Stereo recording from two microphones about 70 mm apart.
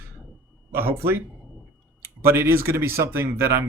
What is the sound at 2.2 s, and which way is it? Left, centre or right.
Speech, right.